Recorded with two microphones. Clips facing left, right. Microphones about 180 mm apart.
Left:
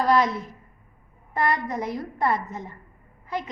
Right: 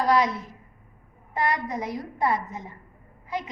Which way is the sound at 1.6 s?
10° right (ahead or behind).